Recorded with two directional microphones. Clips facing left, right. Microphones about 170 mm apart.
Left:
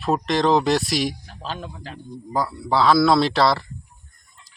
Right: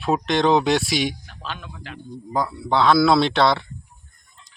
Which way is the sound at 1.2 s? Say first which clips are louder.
Left 3 dB; 35° left (ahead or behind).